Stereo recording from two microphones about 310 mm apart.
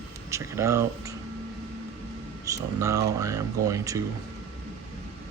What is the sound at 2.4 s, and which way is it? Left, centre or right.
Speech, centre.